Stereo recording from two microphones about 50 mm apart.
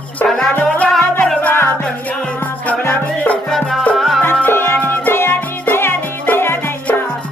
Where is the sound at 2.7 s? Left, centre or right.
Left.